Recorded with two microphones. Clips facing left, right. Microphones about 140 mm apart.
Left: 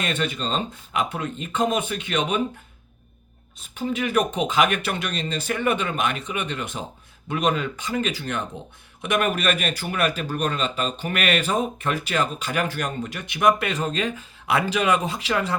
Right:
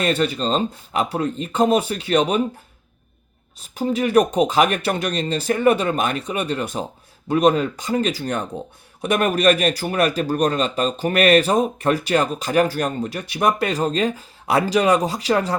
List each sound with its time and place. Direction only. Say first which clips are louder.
0.0 s a man's voice: right 6 dB; 35° right (ahead or behind)
3.8 s a man's voice: right 6 dB; 35° right (ahead or behind)